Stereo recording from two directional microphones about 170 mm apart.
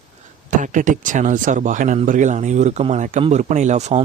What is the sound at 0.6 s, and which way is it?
Speech, 50° right (ahead or behind).